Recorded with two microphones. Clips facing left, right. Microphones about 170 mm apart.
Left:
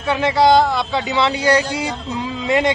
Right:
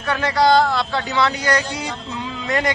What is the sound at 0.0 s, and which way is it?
Speech, 25° left (ahead or behind).